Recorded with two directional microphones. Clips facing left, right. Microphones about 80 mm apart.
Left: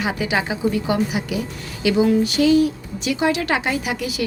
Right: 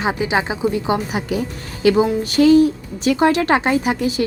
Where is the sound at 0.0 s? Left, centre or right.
Right.